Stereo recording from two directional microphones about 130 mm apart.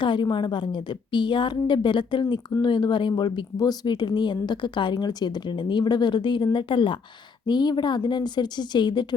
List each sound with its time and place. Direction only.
0.0 s a woman's voice: 40° left (ahead or behind)